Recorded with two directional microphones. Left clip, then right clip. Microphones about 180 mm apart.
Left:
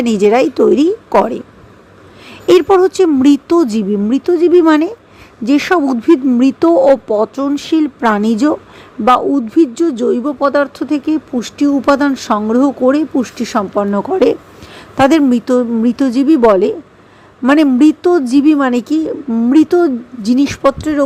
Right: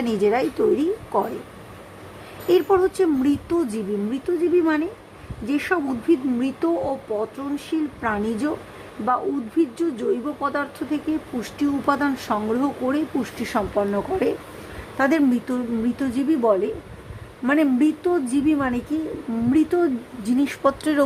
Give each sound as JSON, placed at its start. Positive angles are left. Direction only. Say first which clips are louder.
{"t": 0.0, "sound": "speech", "louder": "left 10 dB", "side_deg": 35}
{"t": 2.5, "sound": "speech", "louder": "left 10 dB", "side_deg": 40}